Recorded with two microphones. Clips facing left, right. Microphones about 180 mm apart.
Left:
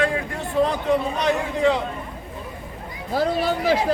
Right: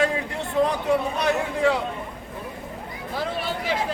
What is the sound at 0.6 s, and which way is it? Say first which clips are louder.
A man's voice: left 1 dB; 10° right (ahead or behind).